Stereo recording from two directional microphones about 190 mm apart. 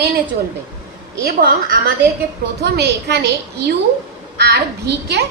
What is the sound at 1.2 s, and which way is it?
A woman's voice, 55° right (ahead or behind).